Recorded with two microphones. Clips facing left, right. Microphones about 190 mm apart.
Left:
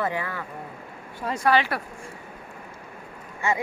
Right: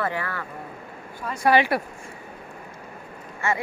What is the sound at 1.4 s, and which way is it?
Speech, 15° right (ahead or behind).